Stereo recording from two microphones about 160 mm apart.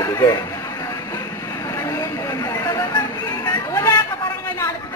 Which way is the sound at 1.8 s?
20° left (ahead or behind).